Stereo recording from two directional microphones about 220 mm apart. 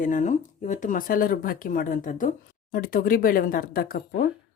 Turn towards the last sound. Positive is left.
turn(degrees=40)  # may be behind; listen again after turning